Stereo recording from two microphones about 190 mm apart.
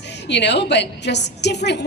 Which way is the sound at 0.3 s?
65° left (ahead or behind).